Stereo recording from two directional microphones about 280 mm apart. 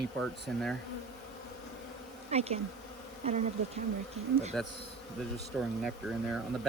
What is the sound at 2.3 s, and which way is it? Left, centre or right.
Bee, right.